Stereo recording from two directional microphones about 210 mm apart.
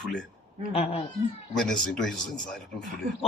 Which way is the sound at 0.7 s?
30° left (ahead or behind).